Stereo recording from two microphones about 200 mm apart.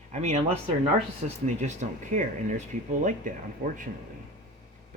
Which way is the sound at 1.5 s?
35° right (ahead or behind).